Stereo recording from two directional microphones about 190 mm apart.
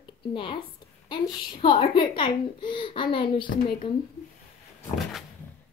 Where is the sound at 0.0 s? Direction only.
25° left (ahead or behind).